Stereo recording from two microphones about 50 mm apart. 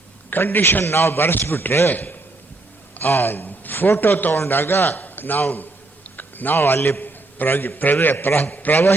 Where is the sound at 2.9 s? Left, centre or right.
Left.